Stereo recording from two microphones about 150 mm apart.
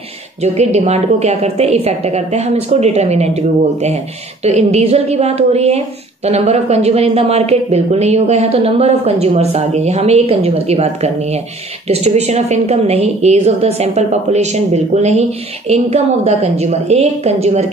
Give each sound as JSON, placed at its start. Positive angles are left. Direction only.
{"t": 0.4, "sound": "a woman's voice", "side_deg": -45}